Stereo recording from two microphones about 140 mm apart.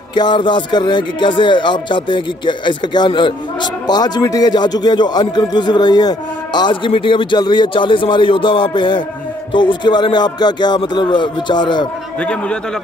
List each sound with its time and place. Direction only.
0.1 s speech: 35° left (ahead or behind)
12.2 s a man's voice: 10° left (ahead or behind)